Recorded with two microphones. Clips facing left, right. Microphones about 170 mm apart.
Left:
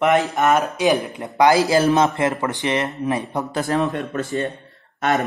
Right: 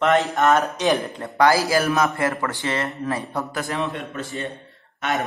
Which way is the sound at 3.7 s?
40° left (ahead or behind).